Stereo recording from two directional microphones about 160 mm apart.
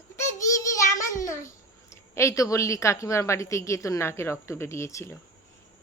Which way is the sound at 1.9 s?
20° left (ahead or behind).